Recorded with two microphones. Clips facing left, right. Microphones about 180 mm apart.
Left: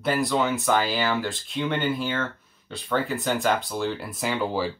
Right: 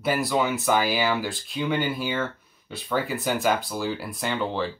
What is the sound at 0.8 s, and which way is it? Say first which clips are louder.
Speech: right 1 dB; 15° right (ahead or behind).